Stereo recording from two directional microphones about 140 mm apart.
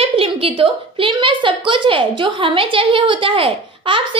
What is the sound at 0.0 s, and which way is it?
A woman's voice, 40° right (ahead or behind).